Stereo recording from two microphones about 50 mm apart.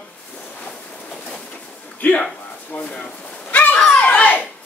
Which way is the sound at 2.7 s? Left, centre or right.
Left.